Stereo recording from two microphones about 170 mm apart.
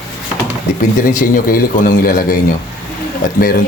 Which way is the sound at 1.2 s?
55° left (ahead or behind).